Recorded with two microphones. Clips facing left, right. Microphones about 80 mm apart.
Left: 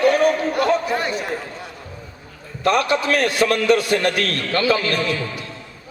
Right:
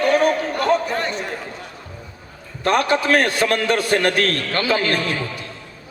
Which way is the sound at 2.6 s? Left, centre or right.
Right.